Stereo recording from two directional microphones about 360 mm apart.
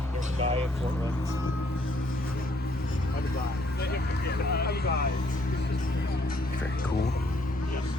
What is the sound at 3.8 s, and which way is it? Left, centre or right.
Vehicle, left.